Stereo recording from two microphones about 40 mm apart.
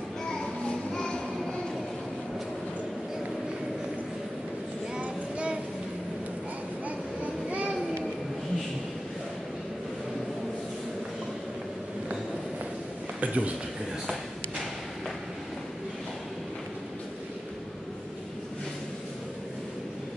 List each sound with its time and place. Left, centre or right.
0.3 s a sound: centre
4.9 s child singing: right
7.4 s children playing: right
13.2 s a man's voice: right